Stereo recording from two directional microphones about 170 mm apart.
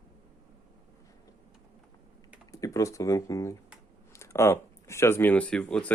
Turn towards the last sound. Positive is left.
turn(degrees=5)  # may be behind; listen again after turning